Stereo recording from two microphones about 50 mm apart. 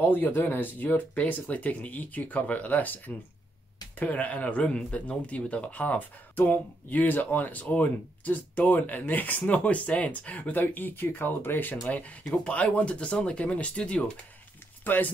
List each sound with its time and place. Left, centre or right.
0.0 s speech: left
10.5 s speech: left
11.9 s speech: left
14.8 s speech: left